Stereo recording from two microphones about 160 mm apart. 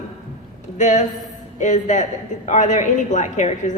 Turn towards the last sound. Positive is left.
turn(degrees=50)  # may be behind; listen again after turning